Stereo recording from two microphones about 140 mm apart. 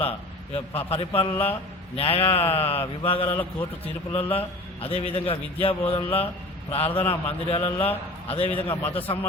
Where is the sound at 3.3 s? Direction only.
15° left (ahead or behind).